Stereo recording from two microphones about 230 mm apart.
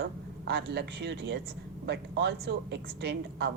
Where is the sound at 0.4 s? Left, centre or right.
Right.